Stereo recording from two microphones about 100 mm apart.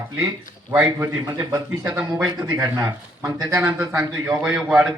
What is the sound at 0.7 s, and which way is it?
A man's voice, 25° right (ahead or behind).